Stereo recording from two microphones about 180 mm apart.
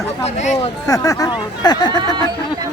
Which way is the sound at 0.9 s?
20° left (ahead or behind).